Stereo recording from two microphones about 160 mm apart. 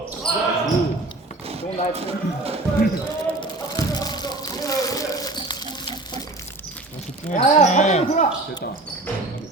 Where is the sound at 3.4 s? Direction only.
25° left (ahead or behind).